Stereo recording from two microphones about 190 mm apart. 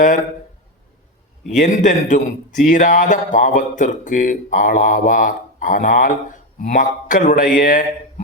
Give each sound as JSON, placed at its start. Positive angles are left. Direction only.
{"t": 1.5, "sound": "speech", "side_deg": 40}